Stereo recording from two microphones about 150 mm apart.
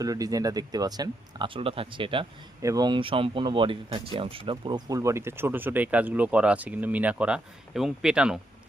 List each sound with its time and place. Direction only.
0.0 s speech: 25° right (ahead or behind)
2.6 s speech: 25° right (ahead or behind); by 8.4 s 5° right (ahead or behind)